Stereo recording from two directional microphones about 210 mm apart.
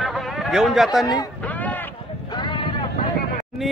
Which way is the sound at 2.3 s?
20° left (ahead or behind).